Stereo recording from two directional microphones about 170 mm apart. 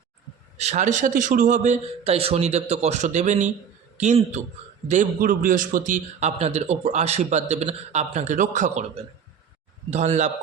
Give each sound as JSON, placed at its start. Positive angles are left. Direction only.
{"t": 0.6, "sound": "a man's voice", "side_deg": -45}